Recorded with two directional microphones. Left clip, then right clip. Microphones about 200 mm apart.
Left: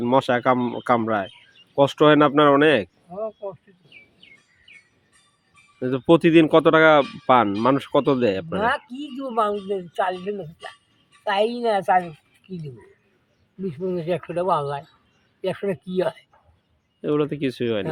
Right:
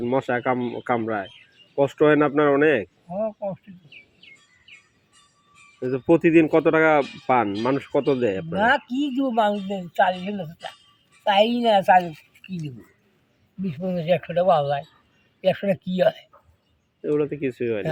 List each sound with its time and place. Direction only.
0.0 s speech: 30° left (ahead or behind)
5.8 s speech: 30° left (ahead or behind)
8.5 s speech: 20° left (ahead or behind)
13.7 s speech: 15° left (ahead or behind)
17.0 s speech: 35° left (ahead or behind)